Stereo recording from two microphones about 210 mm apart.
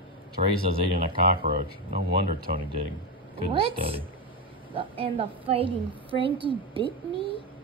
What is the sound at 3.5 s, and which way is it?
A woman's voice, 25° right (ahead or behind).